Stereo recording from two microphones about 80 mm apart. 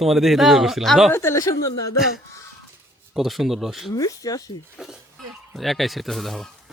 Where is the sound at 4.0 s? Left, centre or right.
Left.